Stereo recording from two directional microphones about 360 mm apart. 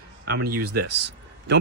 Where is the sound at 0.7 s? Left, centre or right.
Right.